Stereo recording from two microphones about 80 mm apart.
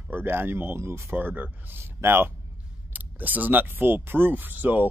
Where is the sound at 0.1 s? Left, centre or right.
Right.